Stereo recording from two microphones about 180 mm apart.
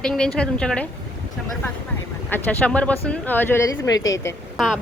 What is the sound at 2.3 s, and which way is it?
Speech, 10° left (ahead or behind).